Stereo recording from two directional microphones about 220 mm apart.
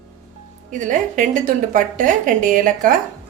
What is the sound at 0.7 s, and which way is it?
A woman's voice, 35° right (ahead or behind).